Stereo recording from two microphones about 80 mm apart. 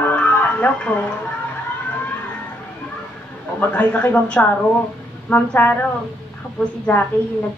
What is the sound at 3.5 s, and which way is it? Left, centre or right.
Speech, centre.